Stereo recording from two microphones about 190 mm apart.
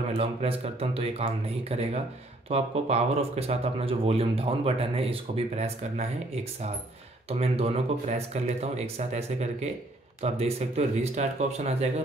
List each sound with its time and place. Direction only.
0.2 s speech: 30° right (ahead or behind)
7.2 s speech: 30° right (ahead or behind)